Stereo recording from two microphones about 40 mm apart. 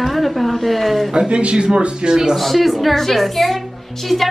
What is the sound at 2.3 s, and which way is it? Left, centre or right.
A woman's voice, centre.